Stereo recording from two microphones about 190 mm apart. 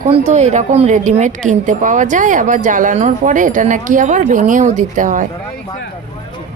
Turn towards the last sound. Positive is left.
turn(degrees=-40)  # may be behind; listen again after turning